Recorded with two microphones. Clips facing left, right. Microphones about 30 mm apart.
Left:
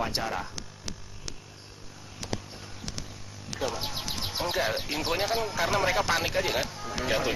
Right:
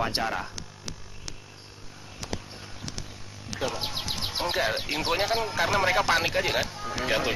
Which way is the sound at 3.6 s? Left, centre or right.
Centre.